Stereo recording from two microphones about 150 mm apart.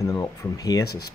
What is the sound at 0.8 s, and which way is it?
Speech, 90° left.